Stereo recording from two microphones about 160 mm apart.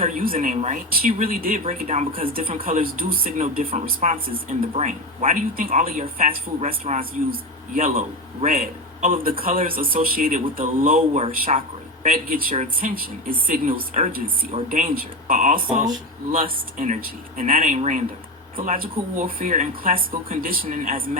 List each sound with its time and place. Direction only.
0.0 s speech: 55° right (ahead or behind)
1.6 s speech: 50° right (ahead or behind)
2.2 s a man's voice: 65° right (ahead or behind)
16.7 s speech: 55° right (ahead or behind)
19.1 s speech: 60° right (ahead or behind)